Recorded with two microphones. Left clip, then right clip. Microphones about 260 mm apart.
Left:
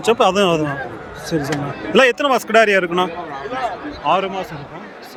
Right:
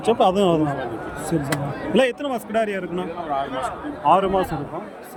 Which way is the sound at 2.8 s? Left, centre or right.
Left.